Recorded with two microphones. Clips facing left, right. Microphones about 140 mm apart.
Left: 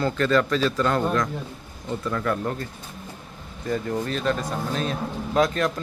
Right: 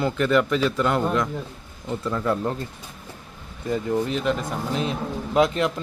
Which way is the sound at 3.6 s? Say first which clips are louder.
Right 2 dB; 15° right (ahead or behind).